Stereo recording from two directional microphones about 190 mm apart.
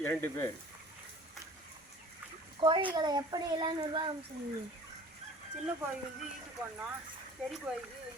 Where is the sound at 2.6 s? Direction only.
25° right (ahead or behind).